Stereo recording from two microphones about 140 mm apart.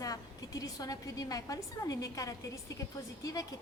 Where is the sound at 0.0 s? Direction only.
25° left (ahead or behind).